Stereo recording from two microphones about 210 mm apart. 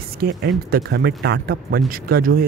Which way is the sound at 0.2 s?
45° right (ahead or behind).